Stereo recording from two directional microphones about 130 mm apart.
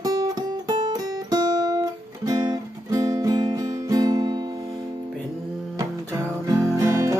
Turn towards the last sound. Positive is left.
turn(degrees=-25)  # may be behind; listen again after turning